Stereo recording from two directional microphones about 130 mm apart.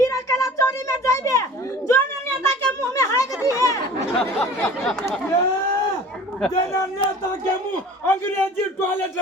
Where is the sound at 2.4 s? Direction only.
25° left (ahead or behind).